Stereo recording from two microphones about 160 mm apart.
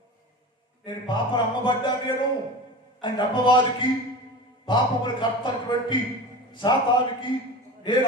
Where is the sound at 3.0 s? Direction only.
30° left (ahead or behind).